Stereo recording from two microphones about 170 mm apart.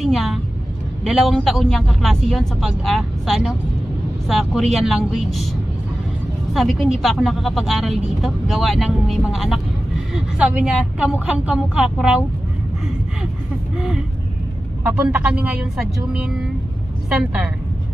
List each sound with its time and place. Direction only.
0.0 s a woman's voice: centre (ahead or behind)
14.9 s a woman's voice: 10° right (ahead or behind)